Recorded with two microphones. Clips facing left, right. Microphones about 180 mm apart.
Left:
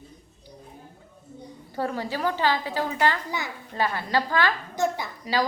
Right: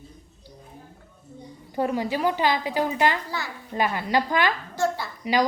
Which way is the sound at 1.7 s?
15° right (ahead or behind).